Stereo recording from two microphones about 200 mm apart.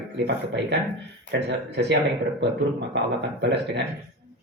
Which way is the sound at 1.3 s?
60° right (ahead or behind).